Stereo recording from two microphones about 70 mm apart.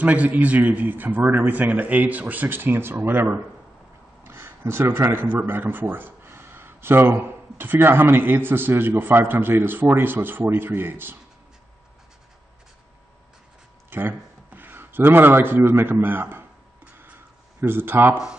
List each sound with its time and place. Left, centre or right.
0.0 s a man's voice: right
13.8 s speech: right
16.9 s a sound: right